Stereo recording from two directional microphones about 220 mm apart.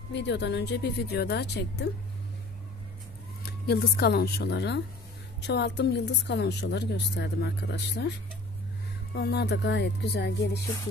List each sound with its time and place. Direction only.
0.1 s speech: 55° left (ahead or behind)
3.4 s speech: 45° left (ahead or behind)
9.1 s speech: 50° left (ahead or behind)